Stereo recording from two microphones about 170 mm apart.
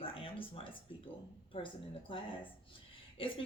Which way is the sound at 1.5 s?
30° left (ahead or behind).